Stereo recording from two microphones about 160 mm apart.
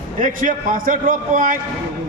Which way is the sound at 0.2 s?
55° right (ahead or behind).